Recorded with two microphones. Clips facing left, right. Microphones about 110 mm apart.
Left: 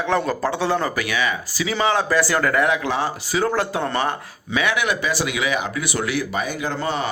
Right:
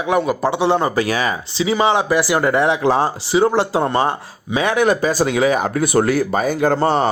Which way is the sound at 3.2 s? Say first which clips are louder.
Right 6 dB; 20° right (ahead or behind).